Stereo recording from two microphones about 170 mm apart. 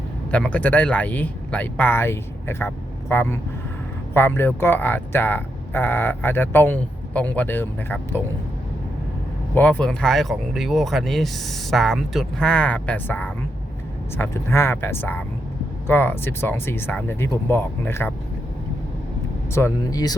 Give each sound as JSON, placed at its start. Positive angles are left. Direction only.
{"t": 0.3, "sound": "speech", "side_deg": 10}
{"t": 9.6, "sound": "speech", "side_deg": 10}
{"t": 19.5, "sound": "speech", "side_deg": 20}